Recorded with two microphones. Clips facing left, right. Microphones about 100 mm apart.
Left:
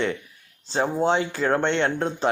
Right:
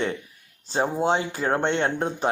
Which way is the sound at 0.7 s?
15° right (ahead or behind).